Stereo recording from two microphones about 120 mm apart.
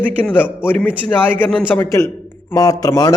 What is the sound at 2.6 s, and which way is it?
Speech, 30° left (ahead or behind).